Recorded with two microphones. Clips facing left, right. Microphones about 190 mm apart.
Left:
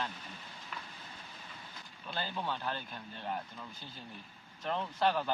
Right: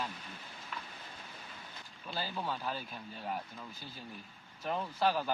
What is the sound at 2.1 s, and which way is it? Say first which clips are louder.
Speech: even; 5° right (ahead or behind).